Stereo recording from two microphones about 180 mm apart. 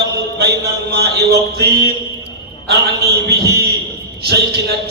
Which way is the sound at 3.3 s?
65° right (ahead or behind).